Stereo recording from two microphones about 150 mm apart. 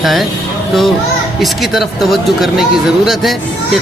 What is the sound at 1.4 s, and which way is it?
Speech, centre (ahead or behind).